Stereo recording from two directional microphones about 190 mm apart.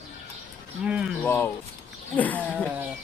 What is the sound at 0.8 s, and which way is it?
Speech, 5° right (ahead or behind).